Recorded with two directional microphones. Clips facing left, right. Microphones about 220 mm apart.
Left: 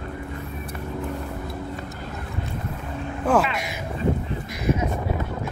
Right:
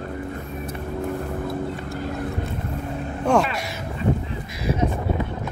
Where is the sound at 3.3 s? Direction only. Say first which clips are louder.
Right 1 dB; 5° left (ahead or behind).